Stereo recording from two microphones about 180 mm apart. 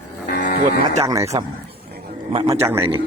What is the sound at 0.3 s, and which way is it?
Music, 55° left (ahead or behind).